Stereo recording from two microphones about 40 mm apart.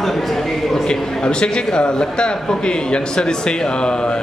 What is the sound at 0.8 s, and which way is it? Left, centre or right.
A man's voice, left.